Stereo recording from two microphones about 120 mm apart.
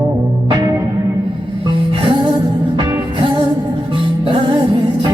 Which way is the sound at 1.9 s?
45° right (ahead or behind).